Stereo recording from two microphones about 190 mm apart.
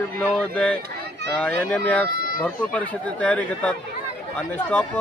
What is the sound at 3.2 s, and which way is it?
Speech, 5° left (ahead or behind).